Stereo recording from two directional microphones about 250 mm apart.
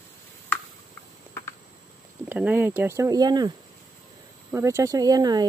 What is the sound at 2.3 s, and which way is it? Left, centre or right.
Speech, centre.